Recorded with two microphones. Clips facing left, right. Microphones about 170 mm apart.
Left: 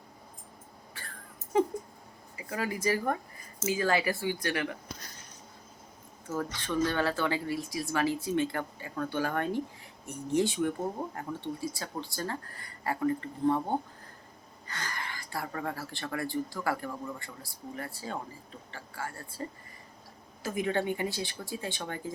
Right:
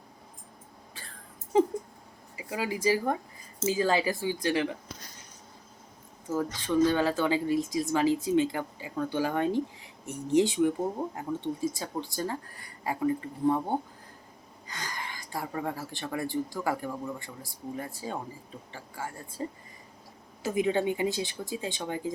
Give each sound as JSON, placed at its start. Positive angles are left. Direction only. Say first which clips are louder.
{"t": 2.3, "sound": "a sound", "louder": "right 1 dB", "side_deg": -15}
{"t": 2.9, "sound": "speech", "louder": "right 2 dB", "side_deg": -10}
{"t": 6.2, "sound": "speech", "louder": "right 4 dB", "side_deg": -15}
{"t": 20.4, "sound": "speech", "louder": "right 4 dB", "side_deg": -20}